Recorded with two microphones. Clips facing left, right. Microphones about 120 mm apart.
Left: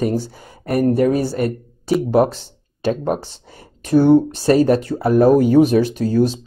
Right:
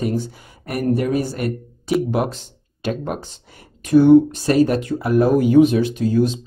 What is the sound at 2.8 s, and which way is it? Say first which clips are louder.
Speech: left 5 dB; 35° left (ahead or behind).